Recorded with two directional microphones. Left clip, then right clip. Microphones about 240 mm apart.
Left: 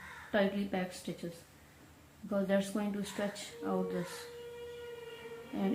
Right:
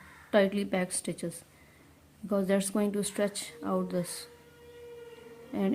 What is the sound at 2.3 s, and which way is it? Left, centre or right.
A woman's voice, right.